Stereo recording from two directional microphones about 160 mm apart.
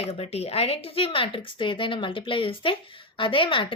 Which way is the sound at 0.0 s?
40° left (ahead or behind).